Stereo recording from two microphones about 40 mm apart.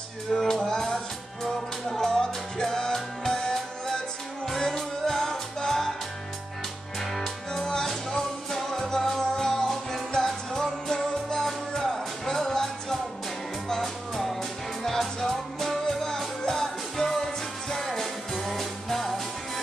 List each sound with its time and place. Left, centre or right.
0.4 s music: centre
7.0 s music: centre
13.7 s music: centre